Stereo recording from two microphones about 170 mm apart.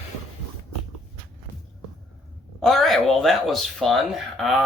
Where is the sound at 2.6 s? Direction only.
Centre (ahead or behind).